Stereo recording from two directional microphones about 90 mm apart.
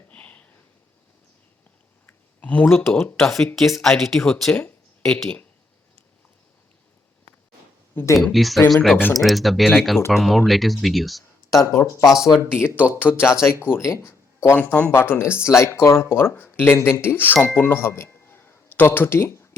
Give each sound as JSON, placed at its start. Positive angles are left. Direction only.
{"t": 0.1, "sound": "a sound", "side_deg": 15}
{"t": 2.0, "sound": "a sound", "side_deg": 15}
{"t": 2.6, "sound": "speech", "side_deg": 25}
{"t": 3.2, "sound": "speech", "side_deg": 5}
{"t": 8.1, "sound": "speech", "side_deg": 0}
{"t": 11.5, "sound": "speech", "side_deg": 30}
{"t": 12.0, "sound": "speech", "side_deg": -5}
{"t": 12.5, "sound": "speech", "side_deg": 20}
{"t": 14.5, "sound": "speech", "side_deg": 15}